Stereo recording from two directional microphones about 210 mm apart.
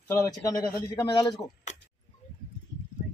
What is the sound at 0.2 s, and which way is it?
A man's voice, 15° left (ahead or behind).